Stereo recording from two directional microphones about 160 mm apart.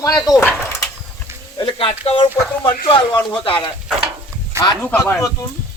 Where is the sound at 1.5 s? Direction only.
30° left (ahead or behind).